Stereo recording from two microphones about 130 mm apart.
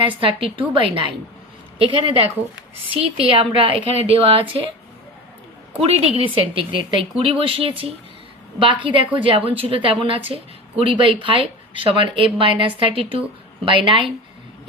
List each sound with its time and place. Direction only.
0.2 s speech: 45° right (ahead or behind)
5.8 s a woman's voice: 55° right (ahead or behind)